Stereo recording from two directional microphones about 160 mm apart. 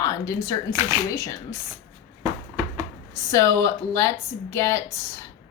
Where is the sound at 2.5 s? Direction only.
20° right (ahead or behind).